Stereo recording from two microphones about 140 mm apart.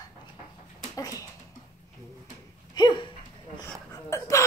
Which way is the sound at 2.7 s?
35° left (ahead or behind).